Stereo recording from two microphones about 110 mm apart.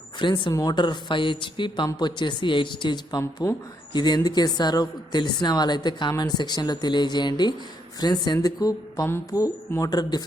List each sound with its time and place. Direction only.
0.2 s speech: 45° left (ahead or behind)